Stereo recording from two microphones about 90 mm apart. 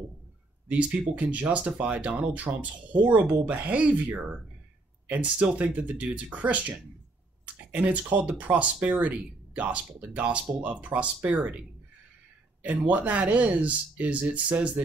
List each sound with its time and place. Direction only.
0.7 s speech: 15° right (ahead or behind)
7.7 s speech: 15° right (ahead or behind)
12.6 s speech: 15° right (ahead or behind)